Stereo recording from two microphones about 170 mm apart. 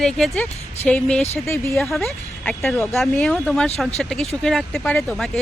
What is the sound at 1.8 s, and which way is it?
Speech, centre (ahead or behind).